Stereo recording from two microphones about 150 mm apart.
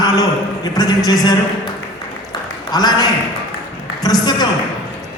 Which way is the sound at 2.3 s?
25° left (ahead or behind).